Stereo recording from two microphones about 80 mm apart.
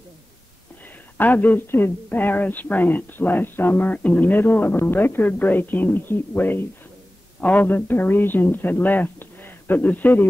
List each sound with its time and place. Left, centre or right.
1.1 s a woman's voice: left